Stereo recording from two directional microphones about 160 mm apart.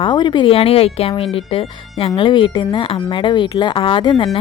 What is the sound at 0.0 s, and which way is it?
Speech, 30° left (ahead or behind).